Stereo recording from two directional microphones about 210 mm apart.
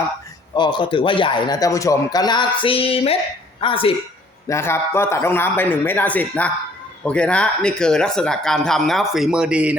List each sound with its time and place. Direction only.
0.5 s a man's voice: 20° left (ahead or behind)
4.4 s speech: 15° left (ahead or behind); by 9.7 s 5° right (ahead or behind)